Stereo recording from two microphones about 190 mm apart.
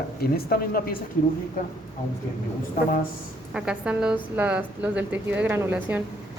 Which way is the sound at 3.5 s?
5° right (ahead or behind).